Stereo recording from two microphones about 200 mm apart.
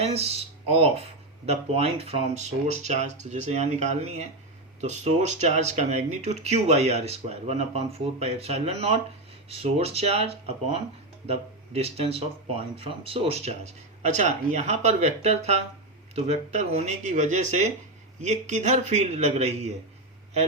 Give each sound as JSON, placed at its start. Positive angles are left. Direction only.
{"t": 0.0, "sound": "speech", "side_deg": -30}